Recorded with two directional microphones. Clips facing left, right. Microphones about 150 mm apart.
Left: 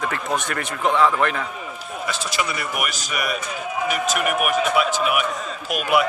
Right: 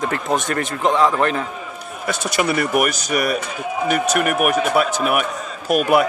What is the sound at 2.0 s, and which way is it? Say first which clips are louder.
A man's voice: right 6 dB; 60° right (ahead or behind).